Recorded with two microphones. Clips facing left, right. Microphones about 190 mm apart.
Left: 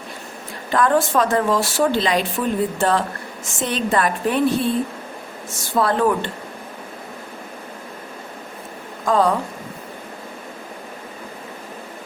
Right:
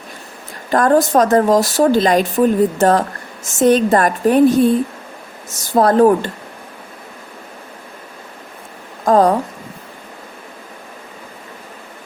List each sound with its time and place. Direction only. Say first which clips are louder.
0.7 s speech: right 5 dB; 45° right (ahead or behind)
5.7 s speech: right 7 dB; 40° right (ahead or behind)
9.0 s speech: right 5 dB; 45° right (ahead or behind)